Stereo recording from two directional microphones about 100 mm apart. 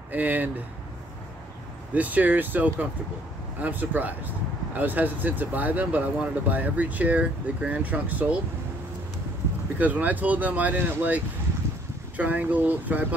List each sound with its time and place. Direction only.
0.1 s speech: 20° right (ahead or behind)
2.0 s speech: 15° right (ahead or behind)
9.8 s speech: 15° right (ahead or behind)